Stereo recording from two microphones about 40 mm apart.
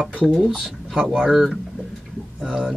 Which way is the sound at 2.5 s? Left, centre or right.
Centre.